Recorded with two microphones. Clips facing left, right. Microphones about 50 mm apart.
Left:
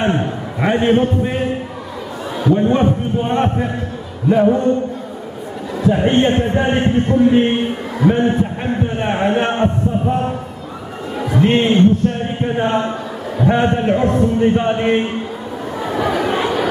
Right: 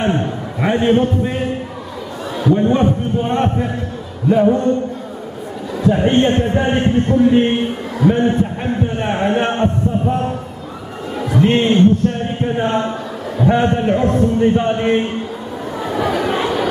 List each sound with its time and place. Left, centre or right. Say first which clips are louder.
0.0 s a man's voice: even; centre
5.9 s a man's voice: even; centre
11.1 s a sound: even; centre
13.4 s a man's voice: even; centre
15.8 s chatter: even; centre